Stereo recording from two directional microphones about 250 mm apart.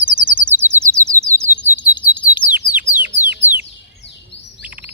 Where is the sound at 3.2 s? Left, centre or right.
Right.